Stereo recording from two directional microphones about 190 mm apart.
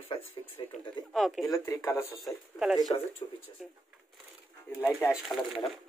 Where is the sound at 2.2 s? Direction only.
Centre (ahead or behind).